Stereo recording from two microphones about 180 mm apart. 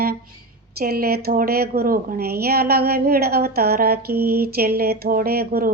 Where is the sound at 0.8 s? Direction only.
55° right (ahead or behind).